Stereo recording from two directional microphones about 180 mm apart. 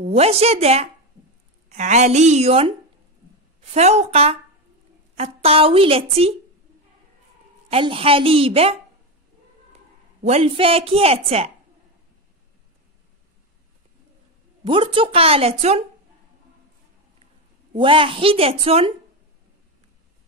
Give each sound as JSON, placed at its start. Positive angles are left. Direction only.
{"t": 0.0, "sound": "a woman's voice", "side_deg": -35}
{"t": 3.7, "sound": "a woman's voice", "side_deg": -40}
{"t": 7.7, "sound": "a woman's voice", "side_deg": -30}
{"t": 10.2, "sound": "a woman's voice", "side_deg": -35}
{"t": 14.6, "sound": "a woman's voice", "side_deg": -30}
{"t": 17.7, "sound": "a woman's voice", "side_deg": -30}